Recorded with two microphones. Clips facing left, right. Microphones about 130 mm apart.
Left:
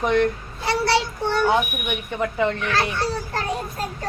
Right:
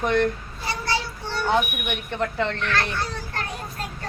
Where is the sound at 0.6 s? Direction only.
75° left (ahead or behind).